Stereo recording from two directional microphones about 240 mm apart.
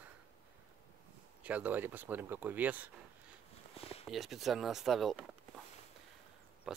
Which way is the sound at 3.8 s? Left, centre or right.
Left.